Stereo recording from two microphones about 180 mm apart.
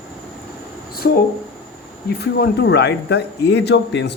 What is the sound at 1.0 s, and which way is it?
A man's voice, 65° left (ahead or behind).